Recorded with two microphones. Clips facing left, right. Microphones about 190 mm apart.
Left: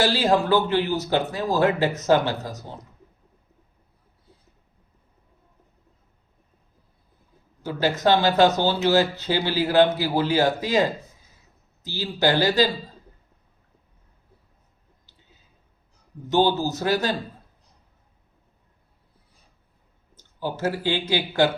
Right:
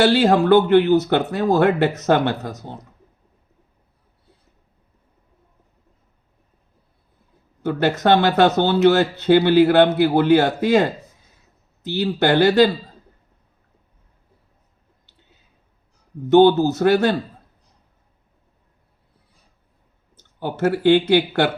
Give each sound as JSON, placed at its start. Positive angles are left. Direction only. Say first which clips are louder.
{"t": 0.0, "sound": "speech", "louder": "right 5 dB", "side_deg": -60}
{"t": 7.6, "sound": "speech", "louder": "right 3 dB", "side_deg": -60}
{"t": 16.3, "sound": "speech", "louder": "right 8 dB", "side_deg": -60}
{"t": 20.4, "sound": "speech", "louder": "right 7 dB", "side_deg": -60}